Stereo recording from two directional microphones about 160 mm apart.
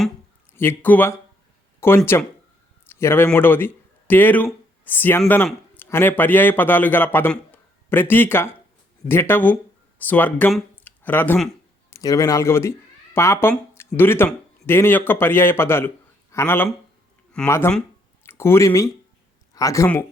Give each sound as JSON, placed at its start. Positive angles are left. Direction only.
{"t": 0.5, "sound": "a man's voice", "side_deg": 15}
{"t": 10.8, "sound": "a sound", "side_deg": 10}
{"t": 11.9, "sound": "speech", "side_deg": 20}